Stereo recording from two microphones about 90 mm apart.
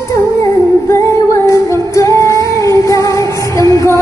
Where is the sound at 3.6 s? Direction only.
35° left (ahead or behind).